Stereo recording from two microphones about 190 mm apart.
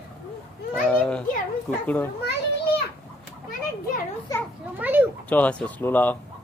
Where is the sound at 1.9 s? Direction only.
10° left (ahead or behind).